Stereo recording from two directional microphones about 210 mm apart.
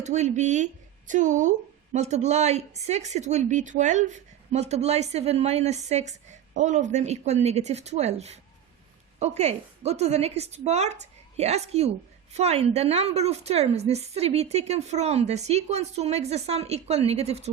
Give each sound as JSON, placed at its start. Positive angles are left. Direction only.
{"t": 0.0, "sound": "a woman's voice", "side_deg": -35}